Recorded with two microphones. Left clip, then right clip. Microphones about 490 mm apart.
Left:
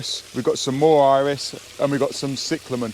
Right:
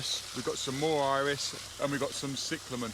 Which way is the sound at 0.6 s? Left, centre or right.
Left.